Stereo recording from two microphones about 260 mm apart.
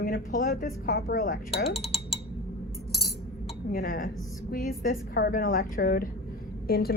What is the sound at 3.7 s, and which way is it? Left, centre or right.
Speech, left.